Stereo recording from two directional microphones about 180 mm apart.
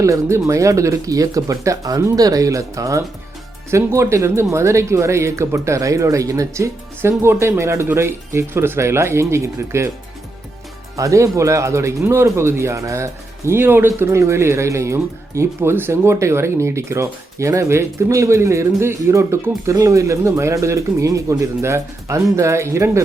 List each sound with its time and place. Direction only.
0.0 s speech: 15° right (ahead or behind)
10.9 s speech: 15° right (ahead or behind)